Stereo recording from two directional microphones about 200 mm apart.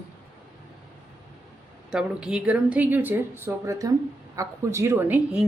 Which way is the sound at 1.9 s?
5° right (ahead or behind).